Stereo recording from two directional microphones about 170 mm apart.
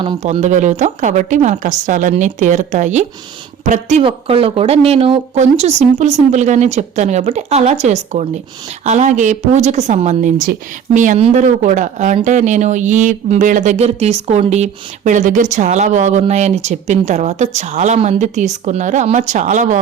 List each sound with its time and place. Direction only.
0.2 s speech: 45° right (ahead or behind)
4.0 s speech: 35° right (ahead or behind)